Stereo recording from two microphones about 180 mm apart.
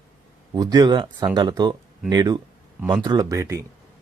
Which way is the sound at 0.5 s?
20° right (ahead or behind).